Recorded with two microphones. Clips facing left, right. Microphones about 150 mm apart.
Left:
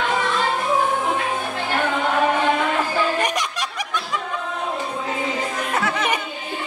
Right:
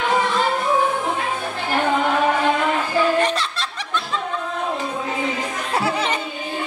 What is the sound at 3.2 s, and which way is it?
Chuckle, 15° left (ahead or behind).